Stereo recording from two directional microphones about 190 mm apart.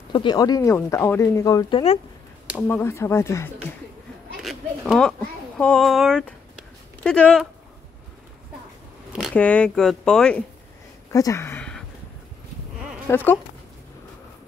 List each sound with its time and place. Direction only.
0.1 s speech: 25° left (ahead or behind)
2.5 s speech: 10° left (ahead or behind)
4.4 s a sound: centre (ahead or behind)
5.6 s speech: 5° left (ahead or behind)
9.3 s speech: 5° left (ahead or behind)
11.1 s a sound: 15° left (ahead or behind)
13.0 s speech: 10° left (ahead or behind)